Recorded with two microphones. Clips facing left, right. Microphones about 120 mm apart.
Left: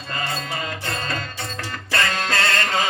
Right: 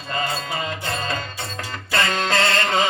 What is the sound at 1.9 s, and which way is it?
Music, 25° right (ahead or behind).